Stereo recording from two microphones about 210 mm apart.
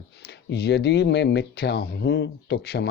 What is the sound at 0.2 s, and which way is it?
Speech, 50° left (ahead or behind).